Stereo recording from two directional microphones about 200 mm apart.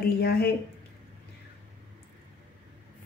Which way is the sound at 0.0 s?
50° left (ahead or behind).